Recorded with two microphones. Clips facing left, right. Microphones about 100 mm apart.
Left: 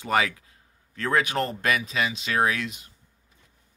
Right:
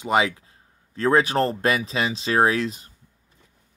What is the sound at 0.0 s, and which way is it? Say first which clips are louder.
Speech: right 3 dB; 20° right (ahead or behind).